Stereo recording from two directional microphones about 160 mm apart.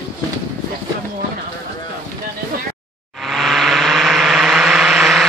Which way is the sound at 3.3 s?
Centre (ahead or behind).